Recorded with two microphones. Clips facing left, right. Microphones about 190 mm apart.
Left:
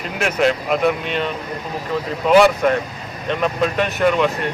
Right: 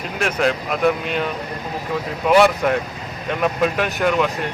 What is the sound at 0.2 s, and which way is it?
Speech, 5° left (ahead or behind).